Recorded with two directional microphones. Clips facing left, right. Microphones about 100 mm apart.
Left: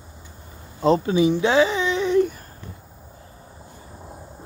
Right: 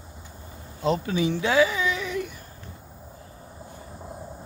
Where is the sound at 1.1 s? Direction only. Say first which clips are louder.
Left 4 dB; 20° left (ahead or behind).